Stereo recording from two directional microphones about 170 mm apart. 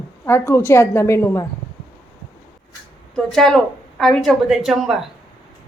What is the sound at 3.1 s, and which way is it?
Speech, centre (ahead or behind).